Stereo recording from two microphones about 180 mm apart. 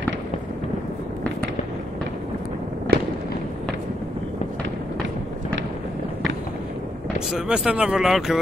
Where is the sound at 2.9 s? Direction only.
60° right (ahead or behind).